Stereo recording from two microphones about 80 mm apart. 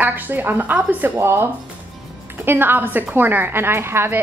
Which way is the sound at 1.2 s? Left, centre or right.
Right.